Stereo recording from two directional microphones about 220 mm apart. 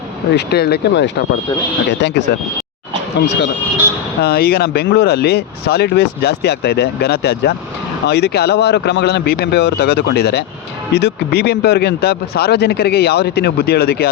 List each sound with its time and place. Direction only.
0.3 s speech: 45° left (ahead or behind)
4.2 s speech: 45° left (ahead or behind)